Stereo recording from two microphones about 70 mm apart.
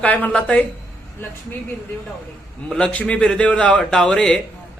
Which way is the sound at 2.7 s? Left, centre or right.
Centre.